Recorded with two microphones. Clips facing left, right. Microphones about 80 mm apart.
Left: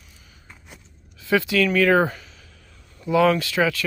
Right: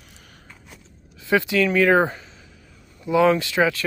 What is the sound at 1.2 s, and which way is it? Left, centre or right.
Speech, right.